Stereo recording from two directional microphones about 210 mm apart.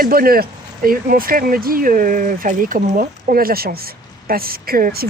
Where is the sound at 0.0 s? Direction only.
45° right (ahead or behind).